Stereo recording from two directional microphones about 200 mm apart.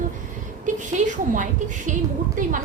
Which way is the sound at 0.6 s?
40° right (ahead or behind).